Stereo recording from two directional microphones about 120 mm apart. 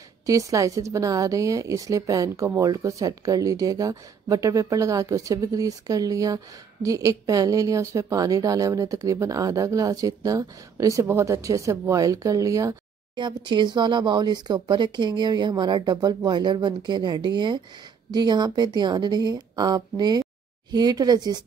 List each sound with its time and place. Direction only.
0.3 s speech: 30° right (ahead or behind)
13.1 s speech: 40° right (ahead or behind)